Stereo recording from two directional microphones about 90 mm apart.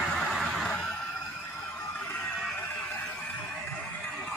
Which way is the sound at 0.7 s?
10° left (ahead or behind).